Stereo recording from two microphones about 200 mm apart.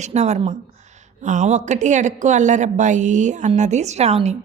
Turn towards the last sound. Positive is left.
turn(degrees=-30)  # may be behind; listen again after turning